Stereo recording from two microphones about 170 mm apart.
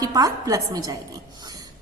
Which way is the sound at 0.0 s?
20° right (ahead or behind).